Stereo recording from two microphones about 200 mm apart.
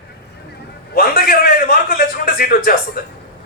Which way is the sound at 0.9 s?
50° left (ahead or behind).